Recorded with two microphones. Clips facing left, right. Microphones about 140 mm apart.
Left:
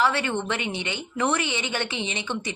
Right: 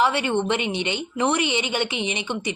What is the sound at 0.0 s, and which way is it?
A woman's voice, 15° right (ahead or behind).